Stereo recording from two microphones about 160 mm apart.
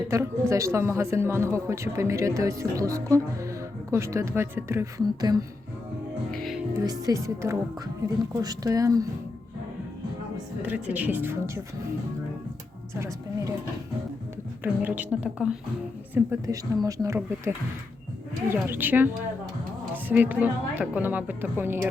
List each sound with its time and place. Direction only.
0.1 s speech: 15° right (ahead or behind)
6.3 s speech: centre (ahead or behind)
6.7 s speech: 25° right (ahead or behind)
10.6 s speech: 10° right (ahead or behind)
12.9 s speech: 20° right (ahead or behind)
14.6 s speech: 10° right (ahead or behind)
16.1 s speech: 20° right (ahead or behind)
18.4 s speech: 15° right (ahead or behind)